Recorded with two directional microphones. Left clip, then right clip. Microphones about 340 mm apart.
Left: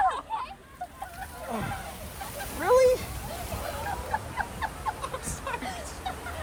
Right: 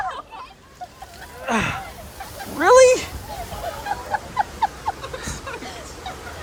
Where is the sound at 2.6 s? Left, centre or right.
Right.